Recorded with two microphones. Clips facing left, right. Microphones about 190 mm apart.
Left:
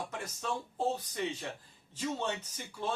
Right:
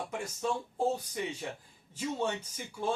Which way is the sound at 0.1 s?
10° right (ahead or behind).